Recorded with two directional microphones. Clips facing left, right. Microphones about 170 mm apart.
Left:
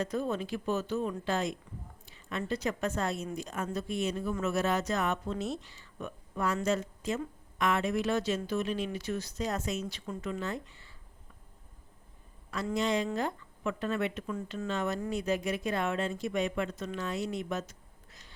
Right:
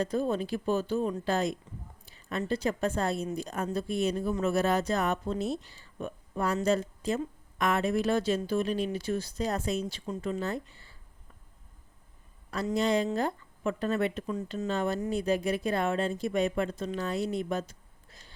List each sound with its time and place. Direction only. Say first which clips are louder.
0.0 s speech: right 3 dB; 35° right (ahead or behind)
2.0 s a sound: right 3 dB; 35° right (ahead or behind)
2.5 s speech: right 3 dB; 30° right (ahead or behind)
9.8 s speech: right 3 dB; 20° right (ahead or behind)
10.2 s speech: right 4 dB; 35° right (ahead or behind)
12.7 s speech: right 3 dB; 35° right (ahead or behind)